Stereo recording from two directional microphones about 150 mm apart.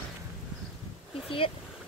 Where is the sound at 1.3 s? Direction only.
35° left (ahead or behind).